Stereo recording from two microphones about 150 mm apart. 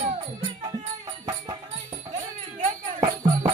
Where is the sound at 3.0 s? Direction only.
20° right (ahead or behind).